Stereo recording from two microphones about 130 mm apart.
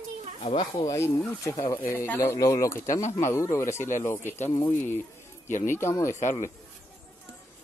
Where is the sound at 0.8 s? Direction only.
20° left (ahead or behind).